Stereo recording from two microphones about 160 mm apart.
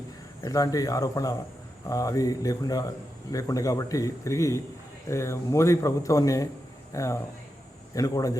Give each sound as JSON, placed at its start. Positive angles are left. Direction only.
{"t": 0.4, "sound": "a man's voice", "side_deg": 20}